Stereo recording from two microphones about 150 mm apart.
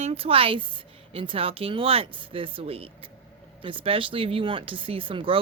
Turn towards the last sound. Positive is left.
turn(degrees=-35)  # may be behind; listen again after turning